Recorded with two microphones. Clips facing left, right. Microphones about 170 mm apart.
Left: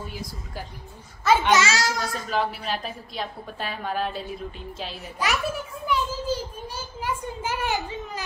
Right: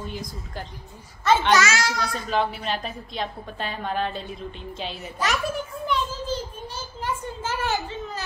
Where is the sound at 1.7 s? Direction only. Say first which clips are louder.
Even; 45° left (ahead or behind).